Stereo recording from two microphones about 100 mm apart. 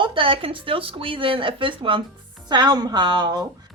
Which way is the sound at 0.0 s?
60° right (ahead or behind).